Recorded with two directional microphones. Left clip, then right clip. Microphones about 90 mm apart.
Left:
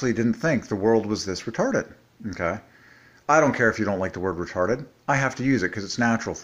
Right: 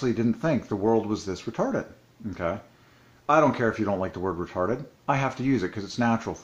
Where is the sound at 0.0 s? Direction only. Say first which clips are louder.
Left 2 dB; centre (ahead or behind).